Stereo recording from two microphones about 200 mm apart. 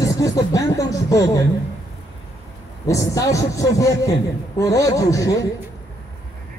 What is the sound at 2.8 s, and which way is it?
A man's voice, 15° left (ahead or behind).